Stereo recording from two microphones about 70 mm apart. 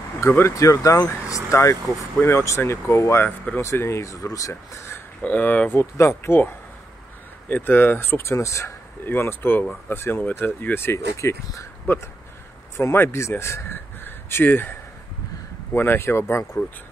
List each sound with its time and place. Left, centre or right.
0.2 s speech: left
5.2 s speech: left
9.0 s speech: left